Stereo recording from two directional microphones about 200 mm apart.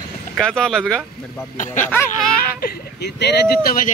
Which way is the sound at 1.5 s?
40° left (ahead or behind).